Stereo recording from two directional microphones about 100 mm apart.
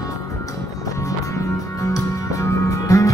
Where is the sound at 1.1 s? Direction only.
35° left (ahead or behind).